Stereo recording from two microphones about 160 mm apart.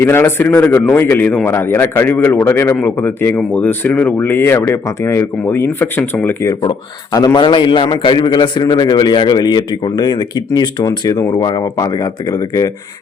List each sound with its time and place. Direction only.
0.0 s speech: 15° left (ahead or behind)
6.5 s a man's voice: 30° left (ahead or behind)